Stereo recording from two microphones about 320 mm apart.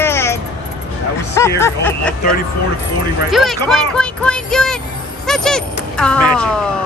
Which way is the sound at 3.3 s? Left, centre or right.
Centre.